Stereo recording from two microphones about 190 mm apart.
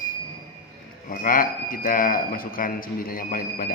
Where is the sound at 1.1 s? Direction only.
50° left (ahead or behind).